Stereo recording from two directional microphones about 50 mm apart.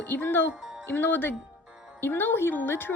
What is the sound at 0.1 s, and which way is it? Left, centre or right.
Speech, left.